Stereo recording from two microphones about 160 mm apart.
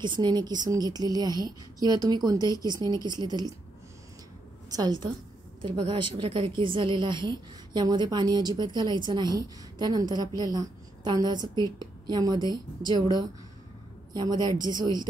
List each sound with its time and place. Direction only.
0.0 s a woman's voice: 25° right (ahead or behind)
4.6 s a woman's voice: 25° right (ahead or behind)